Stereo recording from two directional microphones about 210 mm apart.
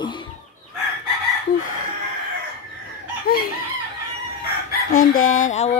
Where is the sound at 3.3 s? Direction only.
45° left (ahead or behind).